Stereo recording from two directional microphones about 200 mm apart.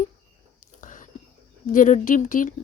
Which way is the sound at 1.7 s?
40° left (ahead or behind).